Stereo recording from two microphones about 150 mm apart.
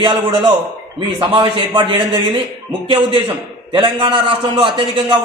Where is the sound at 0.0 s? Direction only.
30° right (ahead or behind).